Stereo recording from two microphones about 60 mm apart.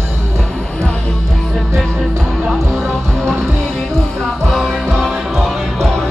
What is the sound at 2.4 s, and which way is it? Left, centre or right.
Music, centre.